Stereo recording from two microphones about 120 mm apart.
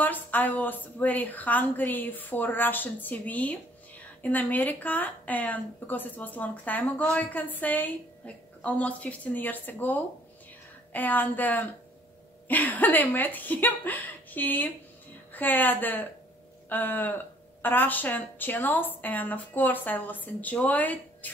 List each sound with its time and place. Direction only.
0.0 s a woman's voice: 15° left (ahead or behind)